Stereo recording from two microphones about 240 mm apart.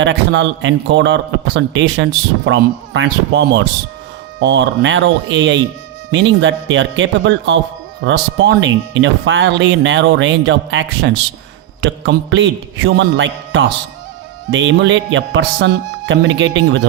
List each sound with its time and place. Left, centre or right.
0.0 s a man's voice: right